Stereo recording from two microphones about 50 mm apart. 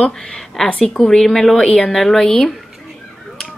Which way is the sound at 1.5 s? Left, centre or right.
Left.